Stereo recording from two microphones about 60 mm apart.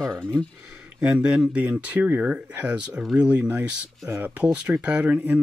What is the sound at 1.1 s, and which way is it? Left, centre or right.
Speech, centre.